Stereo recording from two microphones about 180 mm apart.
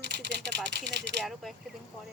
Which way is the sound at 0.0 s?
70° right (ahead or behind).